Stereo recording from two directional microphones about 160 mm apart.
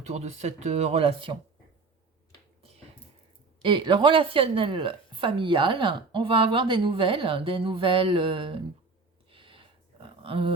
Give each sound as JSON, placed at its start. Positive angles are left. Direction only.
{"t": 0.0, "sound": "speech", "side_deg": -45}
{"t": 3.6, "sound": "a woman's voice", "side_deg": -30}
{"t": 9.3, "sound": "a sound", "side_deg": -35}